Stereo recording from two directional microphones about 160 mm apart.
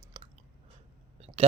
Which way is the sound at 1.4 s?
35° right (ahead or behind).